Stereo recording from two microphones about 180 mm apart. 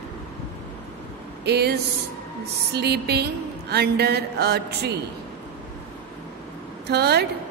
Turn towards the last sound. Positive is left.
turn(degrees=-65)  # may be behind; listen again after turning